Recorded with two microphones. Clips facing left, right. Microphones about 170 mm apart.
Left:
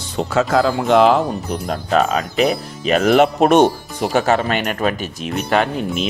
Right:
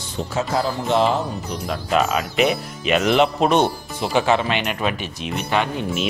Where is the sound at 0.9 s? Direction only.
75° left (ahead or behind).